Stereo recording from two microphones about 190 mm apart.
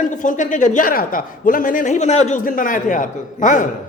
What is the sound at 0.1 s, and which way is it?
A man's voice, 40° left (ahead or behind).